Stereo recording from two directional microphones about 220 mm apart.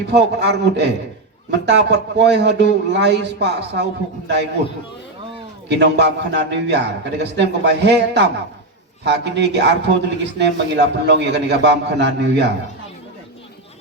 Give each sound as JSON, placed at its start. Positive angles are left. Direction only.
{"t": 0.1, "sound": "a man's voice", "side_deg": -50}
{"t": 5.6, "sound": "a man's voice", "side_deg": -50}